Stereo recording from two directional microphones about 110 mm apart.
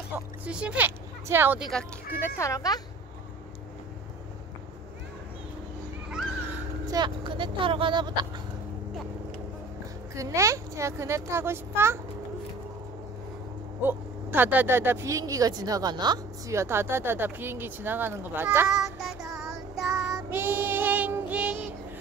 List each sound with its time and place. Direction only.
0.1 s vehicle: 20° right (ahead or behind)
0.5 s speech: 10° right (ahead or behind)
1.6 s speech: 5° left (ahead or behind)
2.2 s a child's voice: 25° left (ahead or behind)
6.9 s speech: 45° right (ahead or behind)
10.1 s speech: 30° right (ahead or behind)
13.8 s a woman's voice: 20° right (ahead or behind); by 16.5 s 40° right (ahead or behind)
16.5 s speech: 20° right (ahead or behind)
18.7 s child singing: 5° right (ahead or behind)
20.2 s child singing: 20° right (ahead or behind)